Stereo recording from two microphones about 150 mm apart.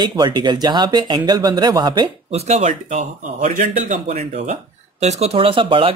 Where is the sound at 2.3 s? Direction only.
45° right (ahead or behind).